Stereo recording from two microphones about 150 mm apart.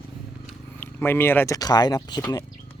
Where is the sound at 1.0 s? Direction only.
15° left (ahead or behind).